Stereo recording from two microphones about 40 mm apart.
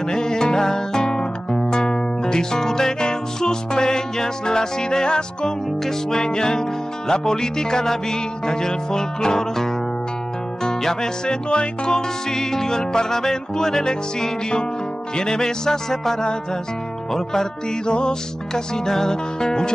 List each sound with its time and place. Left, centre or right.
0.1 s music: centre